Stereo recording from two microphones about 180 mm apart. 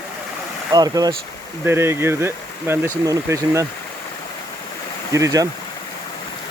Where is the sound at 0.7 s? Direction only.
20° right (ahead or behind).